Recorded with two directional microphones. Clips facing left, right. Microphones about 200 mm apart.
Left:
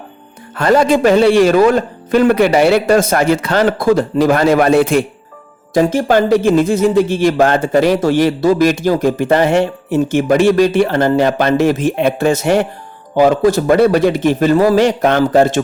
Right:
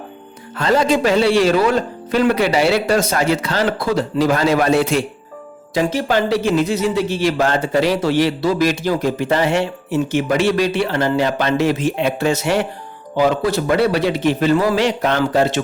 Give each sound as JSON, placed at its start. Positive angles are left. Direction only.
{"t": 0.5, "sound": "speech", "side_deg": 55}